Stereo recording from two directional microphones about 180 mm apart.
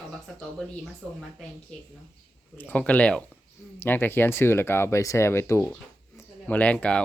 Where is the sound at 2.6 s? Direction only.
10° left (ahead or behind).